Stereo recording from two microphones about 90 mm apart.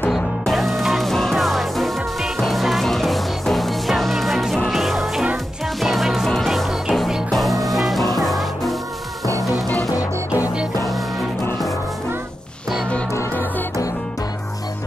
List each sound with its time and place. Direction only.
0.1 s music: centre (ahead or behind)
9.8 s music: 45° left (ahead or behind)
10.4 s music: 10° right (ahead or behind)
13.1 s music: 30° left (ahead or behind)